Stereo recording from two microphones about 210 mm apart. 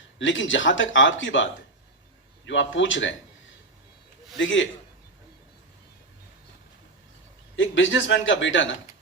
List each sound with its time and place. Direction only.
0.2 s a man's voice: 65° left (ahead or behind)
4.4 s a man's voice: 65° left (ahead or behind)
7.5 s a man's voice: 65° left (ahead or behind)